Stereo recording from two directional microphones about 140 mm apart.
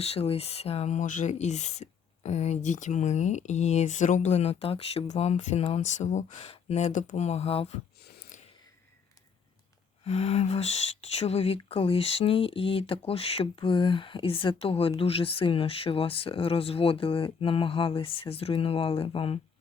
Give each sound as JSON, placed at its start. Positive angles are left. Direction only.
{"t": 0.0, "sound": "speech", "side_deg": 45}
{"t": 8.3, "sound": "a sound", "side_deg": 65}
{"t": 10.0, "sound": "speech", "side_deg": 45}